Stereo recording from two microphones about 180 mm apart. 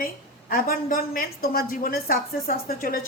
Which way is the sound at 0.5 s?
55° left (ahead or behind).